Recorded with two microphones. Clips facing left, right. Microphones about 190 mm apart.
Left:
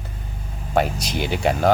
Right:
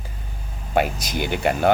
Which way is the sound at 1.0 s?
55° right (ahead or behind).